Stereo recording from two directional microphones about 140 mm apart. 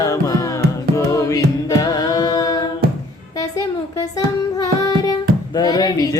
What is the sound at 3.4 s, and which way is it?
Music, 25° left (ahead or behind).